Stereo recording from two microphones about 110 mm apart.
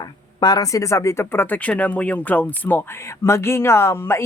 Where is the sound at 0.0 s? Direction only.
40° left (ahead or behind).